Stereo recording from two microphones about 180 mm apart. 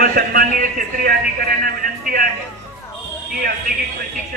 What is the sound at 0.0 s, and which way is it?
A man's voice, 55° right (ahead or behind).